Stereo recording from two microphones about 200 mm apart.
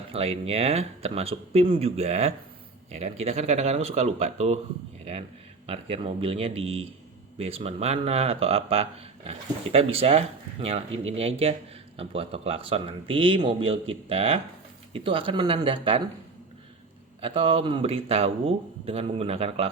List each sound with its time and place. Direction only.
0.1 s speech: 30° right (ahead or behind)
5.6 s speech: 30° right (ahead or behind)
17.2 s speech: 30° right (ahead or behind)